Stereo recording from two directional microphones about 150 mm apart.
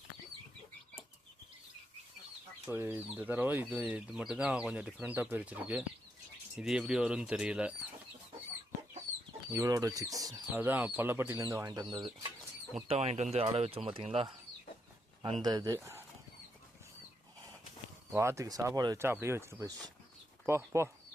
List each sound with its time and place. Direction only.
2.6 s speech: 15° right (ahead or behind)
9.5 s speech: 20° right (ahead or behind)
10.5 s speech: 10° right (ahead or behind); by 12.3 s 30° right (ahead or behind)
12.7 s speech: 45° right (ahead or behind)
15.2 s speech: 30° right (ahead or behind)
18.2 s speech: 20° right (ahead or behind)